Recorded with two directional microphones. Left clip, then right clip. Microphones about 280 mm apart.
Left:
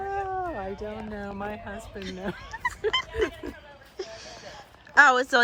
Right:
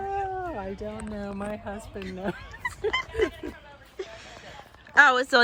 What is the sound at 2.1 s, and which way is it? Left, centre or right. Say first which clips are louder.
Speech: right 3 dB; right.